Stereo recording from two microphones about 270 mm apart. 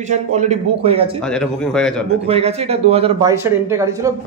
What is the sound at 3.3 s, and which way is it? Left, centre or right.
Speech, centre.